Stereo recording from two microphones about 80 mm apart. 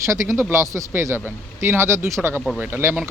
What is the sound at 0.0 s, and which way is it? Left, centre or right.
Speech, right.